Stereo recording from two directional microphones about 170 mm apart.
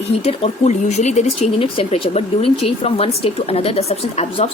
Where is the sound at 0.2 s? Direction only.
40° left (ahead or behind).